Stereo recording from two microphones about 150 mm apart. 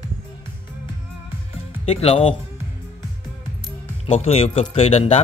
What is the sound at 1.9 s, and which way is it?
Speech, 40° left (ahead or behind).